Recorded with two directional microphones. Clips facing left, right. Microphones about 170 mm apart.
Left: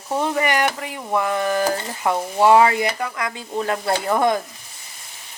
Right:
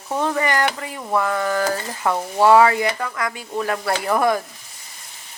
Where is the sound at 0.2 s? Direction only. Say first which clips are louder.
Even; 15° left (ahead or behind).